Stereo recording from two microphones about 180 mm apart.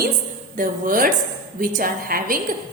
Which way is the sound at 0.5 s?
50° right (ahead or behind).